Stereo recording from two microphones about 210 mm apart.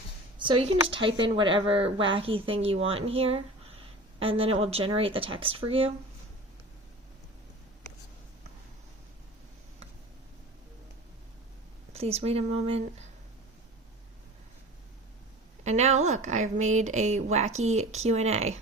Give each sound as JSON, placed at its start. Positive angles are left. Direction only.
{"t": 0.3, "sound": "a woman's voice", "side_deg": -25}
{"t": 11.9, "sound": "speech", "side_deg": -30}
{"t": 15.6, "sound": "speech", "side_deg": -30}